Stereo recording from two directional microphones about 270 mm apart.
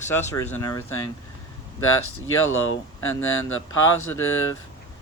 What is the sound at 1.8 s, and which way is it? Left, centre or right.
Speech, left.